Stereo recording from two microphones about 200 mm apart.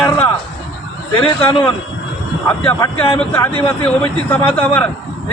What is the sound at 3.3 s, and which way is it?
Speech, 10° left (ahead or behind).